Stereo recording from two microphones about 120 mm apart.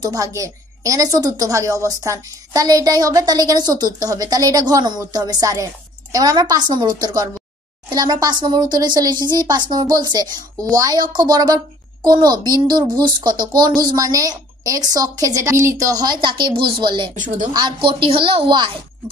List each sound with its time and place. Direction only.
0.0 s speech: 30° right (ahead or behind)
17.1 s speech: 90° right
17.5 s speech: 40° right (ahead or behind)